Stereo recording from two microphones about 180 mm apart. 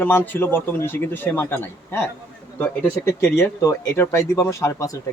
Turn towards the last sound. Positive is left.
turn(degrees=20)  # may be behind; listen again after turning